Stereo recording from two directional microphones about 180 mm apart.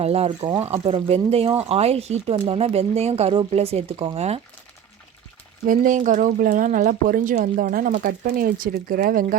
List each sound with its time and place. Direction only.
0.0 s speech: 35° right (ahead or behind)
5.6 s speech: 45° right (ahead or behind)